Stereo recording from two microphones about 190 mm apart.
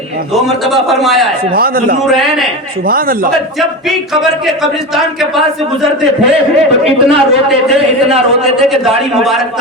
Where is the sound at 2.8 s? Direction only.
50° right (ahead or behind).